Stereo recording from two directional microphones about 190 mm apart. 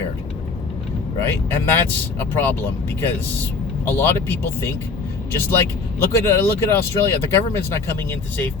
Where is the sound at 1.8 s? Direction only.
10° left (ahead or behind).